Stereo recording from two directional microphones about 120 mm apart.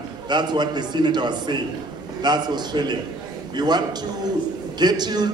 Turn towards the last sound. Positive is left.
turn(degrees=-35)  # may be behind; listen again after turning